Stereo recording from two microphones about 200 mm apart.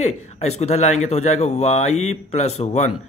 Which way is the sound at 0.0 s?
35° left (ahead or behind).